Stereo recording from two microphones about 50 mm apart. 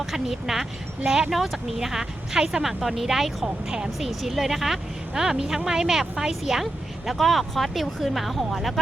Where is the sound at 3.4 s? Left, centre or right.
Centre.